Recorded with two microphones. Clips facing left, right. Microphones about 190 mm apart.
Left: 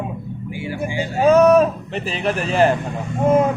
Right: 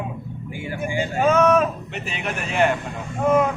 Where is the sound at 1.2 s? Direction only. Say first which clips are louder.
Left 5 dB; 35° left (ahead or behind).